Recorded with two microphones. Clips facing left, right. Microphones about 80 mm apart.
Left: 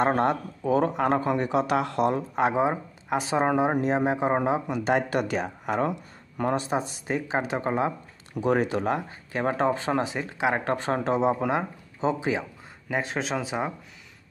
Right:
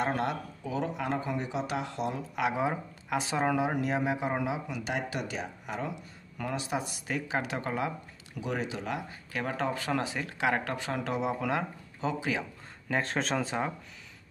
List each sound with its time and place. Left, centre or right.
0.0 s speech: left
2.3 s speech: left
8.4 s speech: left
9.3 s speech: left
10.7 s speech: left
12.8 s speech: centre